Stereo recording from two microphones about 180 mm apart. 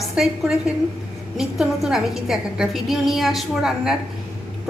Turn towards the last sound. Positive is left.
turn(degrees=0)  # may be behind; listen again after turning